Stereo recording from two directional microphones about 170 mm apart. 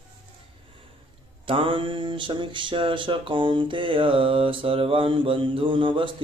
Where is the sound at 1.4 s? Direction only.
30° right (ahead or behind).